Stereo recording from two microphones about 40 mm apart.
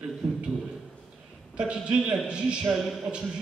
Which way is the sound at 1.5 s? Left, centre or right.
Right.